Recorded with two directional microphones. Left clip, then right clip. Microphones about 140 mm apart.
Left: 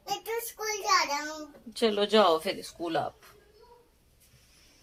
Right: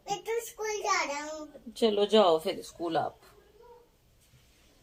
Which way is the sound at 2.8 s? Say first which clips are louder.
Right 1 dB; 20° left (ahead or behind).